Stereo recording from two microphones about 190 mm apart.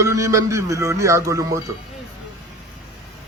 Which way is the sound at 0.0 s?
15° right (ahead or behind).